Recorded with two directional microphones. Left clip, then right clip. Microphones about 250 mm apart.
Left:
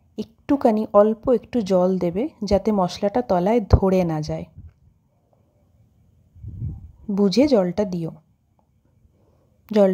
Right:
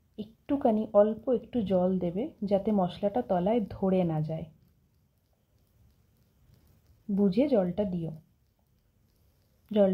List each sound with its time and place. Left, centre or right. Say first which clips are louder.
0.1 s a woman's voice: left 10 dB; left
7.1 s a woman's voice: left 9 dB; left